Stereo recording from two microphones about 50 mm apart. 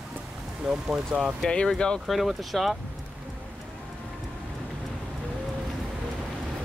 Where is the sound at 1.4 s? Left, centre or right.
Centre.